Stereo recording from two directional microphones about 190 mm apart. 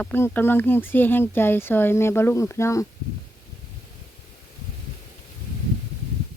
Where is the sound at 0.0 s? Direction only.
10° left (ahead or behind).